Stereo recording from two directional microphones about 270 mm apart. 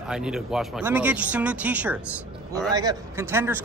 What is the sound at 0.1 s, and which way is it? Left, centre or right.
A man's voice, centre.